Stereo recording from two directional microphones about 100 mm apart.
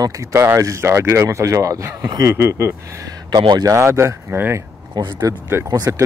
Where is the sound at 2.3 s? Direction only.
25° right (ahead or behind).